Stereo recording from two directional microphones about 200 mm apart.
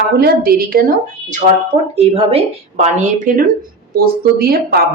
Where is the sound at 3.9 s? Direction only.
50° right (ahead or behind).